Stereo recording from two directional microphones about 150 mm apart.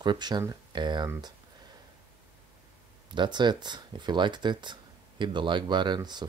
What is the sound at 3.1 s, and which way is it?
Speech, 30° right (ahead or behind).